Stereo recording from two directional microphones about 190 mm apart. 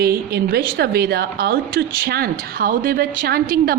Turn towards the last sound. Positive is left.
turn(degrees=-50)  # may be behind; listen again after turning